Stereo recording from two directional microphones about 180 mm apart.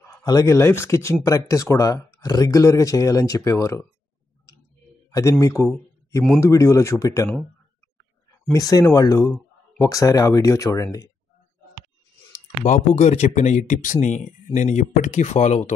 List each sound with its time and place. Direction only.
0.0 s speech: 15° left (ahead or behind)
5.4 s speech: 15° left (ahead or behind)
8.5 s speech: 20° left (ahead or behind)
12.3 s speech: 40° left (ahead or behind)